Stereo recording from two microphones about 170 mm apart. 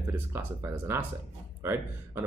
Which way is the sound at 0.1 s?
15° right (ahead or behind).